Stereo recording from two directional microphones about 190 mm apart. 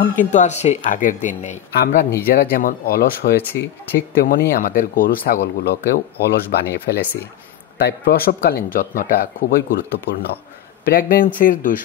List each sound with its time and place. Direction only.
0.3 s speech: 40° left (ahead or behind)
1.9 s speech: 50° left (ahead or behind)